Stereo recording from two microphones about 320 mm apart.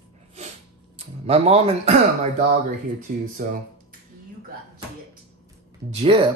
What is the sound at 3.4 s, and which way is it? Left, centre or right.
Speech, right.